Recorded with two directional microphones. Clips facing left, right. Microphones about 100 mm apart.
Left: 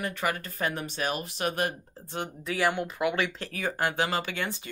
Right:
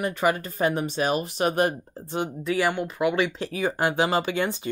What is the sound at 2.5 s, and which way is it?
Speech, centre (ahead or behind).